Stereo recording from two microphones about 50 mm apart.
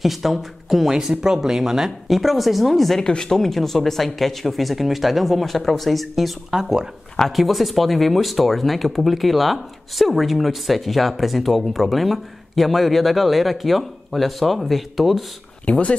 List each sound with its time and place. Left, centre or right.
0.0 s speech: centre
3.0 s speech: centre
6.5 s speech: centre
7.2 s speech: centre
15.6 s speech: left